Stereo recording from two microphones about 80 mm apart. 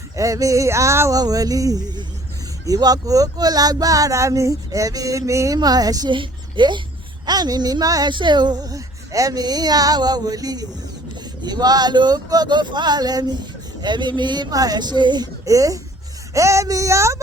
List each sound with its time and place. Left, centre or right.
0.2 s speech: right
1.2 s speech: right
5.5 s speech: right
6.1 s a child's voice: right
7.3 s speech: right
8.1 s speech: right
14.5 s speech: right
15.4 s speech: right